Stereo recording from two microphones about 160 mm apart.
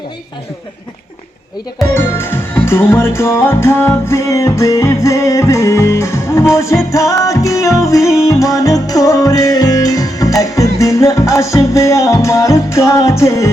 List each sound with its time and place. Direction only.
1.9 s music: 15° left (ahead or behind)